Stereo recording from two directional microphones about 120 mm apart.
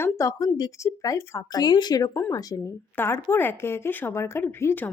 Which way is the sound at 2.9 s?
20° left (ahead or behind).